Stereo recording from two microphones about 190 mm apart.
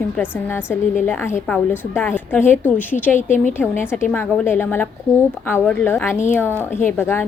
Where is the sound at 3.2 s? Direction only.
40° left (ahead or behind).